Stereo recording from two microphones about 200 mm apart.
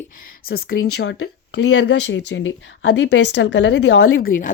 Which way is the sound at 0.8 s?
65° left (ahead or behind).